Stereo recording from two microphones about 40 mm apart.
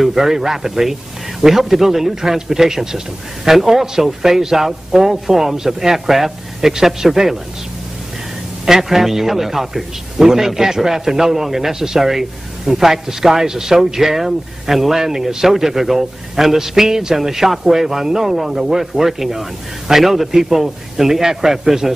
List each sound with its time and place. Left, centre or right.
0.0 s a man's voice: centre
8.6 s a man's voice: centre